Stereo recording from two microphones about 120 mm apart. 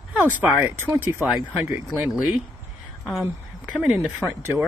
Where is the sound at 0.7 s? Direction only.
15° right (ahead or behind).